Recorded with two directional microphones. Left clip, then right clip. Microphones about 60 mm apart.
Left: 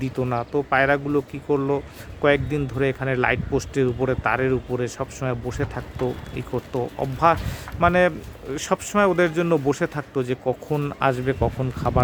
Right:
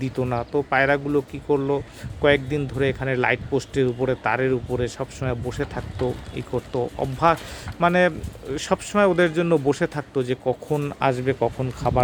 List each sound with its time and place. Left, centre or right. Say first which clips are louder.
0.0 s speech: even; centre
6.7 s speech: even; right
10.5 s speech: right 1 dB; centre
11.0 s speech: even; right